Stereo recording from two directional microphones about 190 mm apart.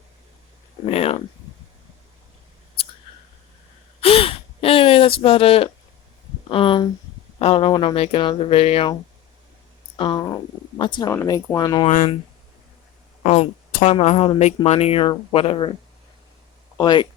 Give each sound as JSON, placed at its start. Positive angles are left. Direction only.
{"t": 0.9, "sound": "a sound", "side_deg": 30}
{"t": 4.0, "sound": "a sound", "side_deg": 30}
{"t": 7.3, "sound": "speech", "side_deg": 30}
{"t": 10.0, "sound": "speech", "side_deg": 25}
{"t": 11.9, "sound": "speech", "side_deg": 40}
{"t": 13.2, "sound": "speech", "side_deg": 35}
{"t": 16.7, "sound": "speech", "side_deg": 20}